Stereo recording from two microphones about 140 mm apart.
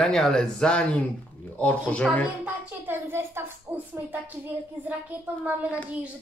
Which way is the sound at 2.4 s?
15° right (ahead or behind).